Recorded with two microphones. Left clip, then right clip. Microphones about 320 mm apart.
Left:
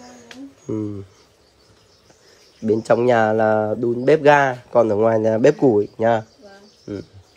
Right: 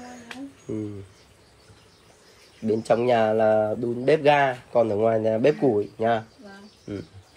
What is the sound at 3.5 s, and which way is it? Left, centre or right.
Speech, left.